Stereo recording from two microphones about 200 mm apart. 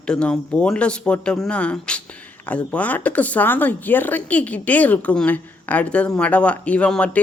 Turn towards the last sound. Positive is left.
turn(degrees=5)  # may be behind; listen again after turning